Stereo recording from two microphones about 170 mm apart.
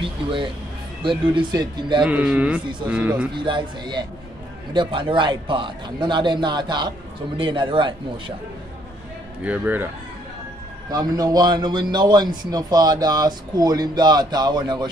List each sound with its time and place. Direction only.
0.0 s a man's voice: 30° right (ahead or behind)
2.0 s speech: 5° right (ahead or behind)
3.3 s a man's voice: 30° right (ahead or behind)
9.4 s speech: 10° right (ahead or behind)
10.9 s a man's voice: 20° right (ahead or behind)